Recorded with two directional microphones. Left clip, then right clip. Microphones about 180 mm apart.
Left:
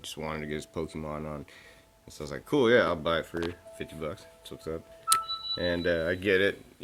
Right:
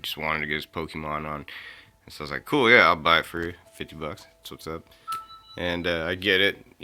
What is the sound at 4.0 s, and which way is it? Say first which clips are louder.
Speech: right 2 dB; 30° right (ahead or behind).